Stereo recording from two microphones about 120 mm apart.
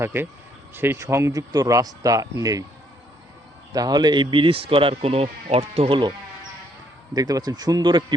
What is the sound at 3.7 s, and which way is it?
Speech, 35° right (ahead or behind).